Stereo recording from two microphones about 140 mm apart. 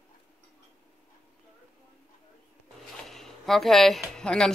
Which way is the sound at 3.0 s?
5° left (ahead or behind).